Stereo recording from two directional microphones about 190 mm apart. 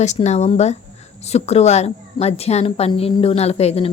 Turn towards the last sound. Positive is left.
turn(degrees=35)  # may be behind; listen again after turning